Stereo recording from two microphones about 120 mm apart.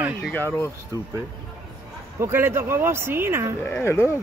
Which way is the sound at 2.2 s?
20° right (ahead or behind).